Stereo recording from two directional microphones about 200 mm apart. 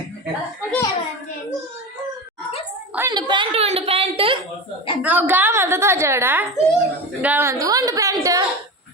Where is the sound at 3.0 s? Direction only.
20° right (ahead or behind).